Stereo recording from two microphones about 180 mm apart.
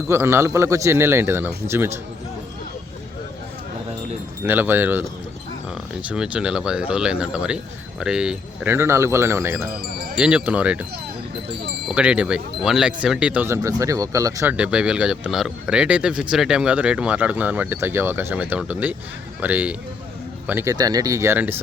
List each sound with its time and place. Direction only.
0.1 s speech: 15° right (ahead or behind)
4.4 s speech: 10° right (ahead or behind)
6.1 s speech: 5° right (ahead or behind)
11.9 s speech: 5° right (ahead or behind)
14.5 s speech: 5° right (ahead or behind)